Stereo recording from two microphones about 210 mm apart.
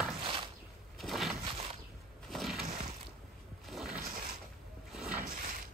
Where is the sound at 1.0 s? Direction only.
Centre (ahead or behind).